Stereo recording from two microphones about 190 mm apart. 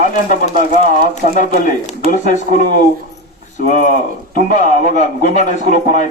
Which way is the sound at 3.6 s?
40° left (ahead or behind).